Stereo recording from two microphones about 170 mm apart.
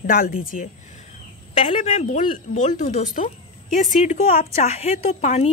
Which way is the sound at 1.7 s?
40° left (ahead or behind).